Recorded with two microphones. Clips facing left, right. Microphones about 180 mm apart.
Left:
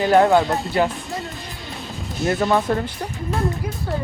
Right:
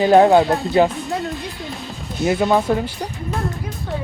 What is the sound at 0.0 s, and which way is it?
Speech, 20° right (ahead or behind).